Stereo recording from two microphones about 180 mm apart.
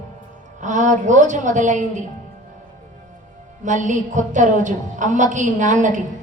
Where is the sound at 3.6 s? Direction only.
45° right (ahead or behind).